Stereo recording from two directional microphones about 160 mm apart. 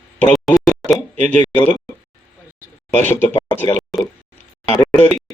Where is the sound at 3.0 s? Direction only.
10° left (ahead or behind).